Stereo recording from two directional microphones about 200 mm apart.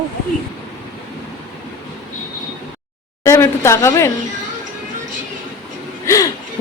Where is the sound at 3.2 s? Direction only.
15° left (ahead or behind).